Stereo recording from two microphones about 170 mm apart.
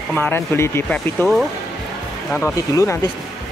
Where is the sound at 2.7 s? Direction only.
15° left (ahead or behind).